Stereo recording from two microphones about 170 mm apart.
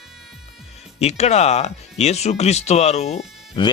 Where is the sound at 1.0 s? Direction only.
40° left (ahead or behind).